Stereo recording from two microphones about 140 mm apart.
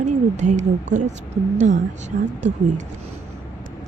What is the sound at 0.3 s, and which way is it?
A woman's voice, 60° right (ahead or behind).